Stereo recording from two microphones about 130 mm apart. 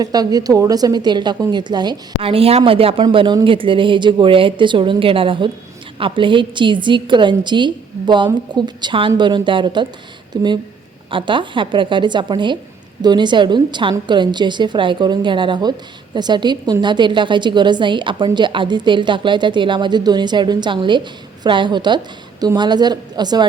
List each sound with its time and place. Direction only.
0.0 s a woman's voice: 30° right (ahead or behind)
2.2 s a woman's voice: 50° right (ahead or behind); by 23.5 s 35° right (ahead or behind)